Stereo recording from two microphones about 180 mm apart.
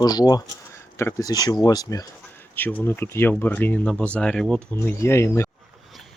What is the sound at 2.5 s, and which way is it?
Speech, 10° left (ahead or behind).